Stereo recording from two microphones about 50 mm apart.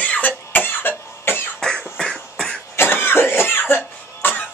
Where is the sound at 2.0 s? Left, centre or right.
Centre.